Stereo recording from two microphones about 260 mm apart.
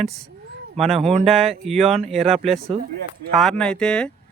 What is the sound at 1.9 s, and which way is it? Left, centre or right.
Speech, right.